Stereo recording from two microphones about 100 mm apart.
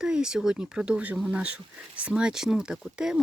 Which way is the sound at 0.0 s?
5° right (ahead or behind).